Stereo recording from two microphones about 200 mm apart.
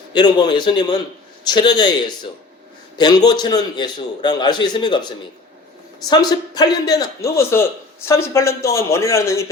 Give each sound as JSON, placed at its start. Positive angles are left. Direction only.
{"t": 0.1, "sound": "a man's voice", "side_deg": 20}